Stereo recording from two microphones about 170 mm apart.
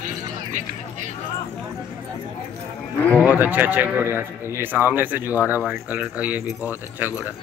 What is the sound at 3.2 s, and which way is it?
A man's voice, 10° right (ahead or behind).